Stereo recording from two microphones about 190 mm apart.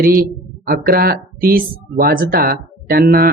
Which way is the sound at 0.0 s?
50° right (ahead or behind).